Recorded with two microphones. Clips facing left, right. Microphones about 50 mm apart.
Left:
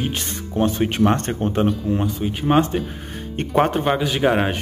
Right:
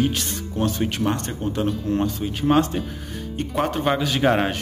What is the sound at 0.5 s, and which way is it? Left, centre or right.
Speech, left.